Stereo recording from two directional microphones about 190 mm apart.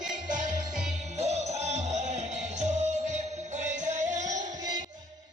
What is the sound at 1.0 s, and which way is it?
Music, 35° right (ahead or behind).